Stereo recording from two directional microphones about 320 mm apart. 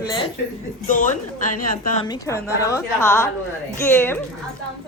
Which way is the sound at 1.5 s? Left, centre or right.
Left.